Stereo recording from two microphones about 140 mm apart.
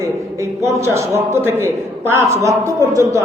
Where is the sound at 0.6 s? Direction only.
20° right (ahead or behind).